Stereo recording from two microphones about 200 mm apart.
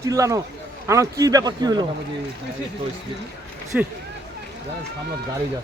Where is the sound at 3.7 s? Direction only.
5° right (ahead or behind).